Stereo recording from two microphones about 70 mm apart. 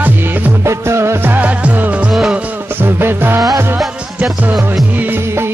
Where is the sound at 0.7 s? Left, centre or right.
Right.